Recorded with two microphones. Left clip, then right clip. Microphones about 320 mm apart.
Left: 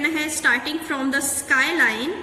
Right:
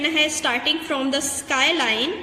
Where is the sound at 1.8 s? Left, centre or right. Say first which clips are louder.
Even; right.